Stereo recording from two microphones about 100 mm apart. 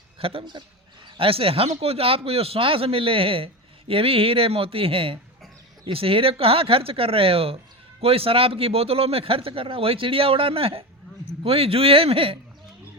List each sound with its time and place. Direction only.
0.2 s speech: 70° right (ahead or behind)